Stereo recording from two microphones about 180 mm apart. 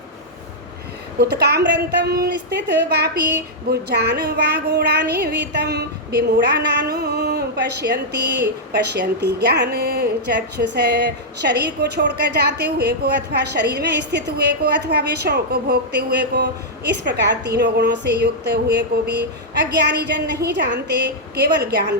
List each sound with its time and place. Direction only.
1.2 s a woman's voice: 65° right (ahead or behind)
7.0 s a sound: 65° right (ahead or behind)
8.3 s a woman's voice: 70° right (ahead or behind)